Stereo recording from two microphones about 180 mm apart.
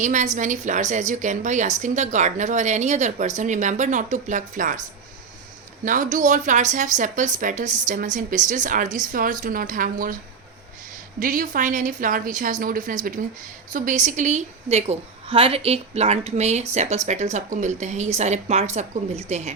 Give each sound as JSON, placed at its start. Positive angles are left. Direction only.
{"t": 0.0, "sound": "a woman's voice", "side_deg": -45}
{"t": 5.8, "sound": "a woman's voice", "side_deg": -45}
{"t": 11.2, "sound": "a woman's voice", "side_deg": -50}